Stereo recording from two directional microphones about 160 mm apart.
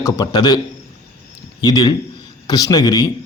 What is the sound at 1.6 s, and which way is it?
Speech, 25° left (ahead or behind).